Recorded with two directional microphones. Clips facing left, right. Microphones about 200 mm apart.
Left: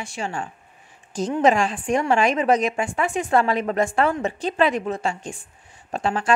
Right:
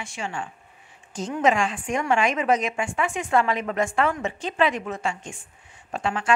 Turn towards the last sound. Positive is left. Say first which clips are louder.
# left 2 dB
turn(degrees=35)  # may be behind; listen again after turning